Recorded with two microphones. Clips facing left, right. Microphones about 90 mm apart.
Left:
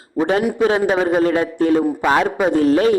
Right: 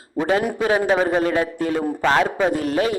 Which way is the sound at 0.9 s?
10° left (ahead or behind).